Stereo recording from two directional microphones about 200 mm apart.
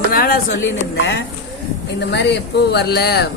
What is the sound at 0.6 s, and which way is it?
A woman's voice, 65° left (ahead or behind).